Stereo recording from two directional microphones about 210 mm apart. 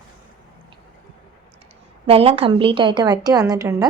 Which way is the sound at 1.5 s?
30° right (ahead or behind).